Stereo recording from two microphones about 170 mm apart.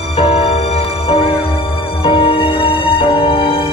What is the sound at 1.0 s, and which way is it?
Music, 35° left (ahead or behind).